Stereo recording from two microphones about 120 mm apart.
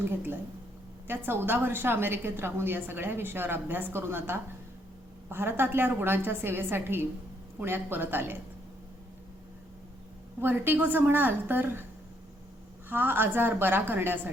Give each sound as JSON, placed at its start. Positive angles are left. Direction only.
{"t": 0.0, "sound": "a woman's voice", "side_deg": -15}
{"t": 10.4, "sound": "a woman's voice", "side_deg": -15}
{"t": 12.9, "sound": "a woman's voice", "side_deg": -15}